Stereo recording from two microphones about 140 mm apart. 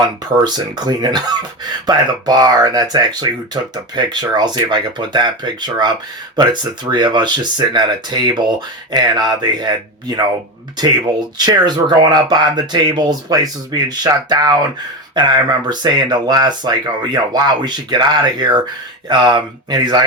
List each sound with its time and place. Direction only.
0.0 s speech: 30° right (ahead or behind)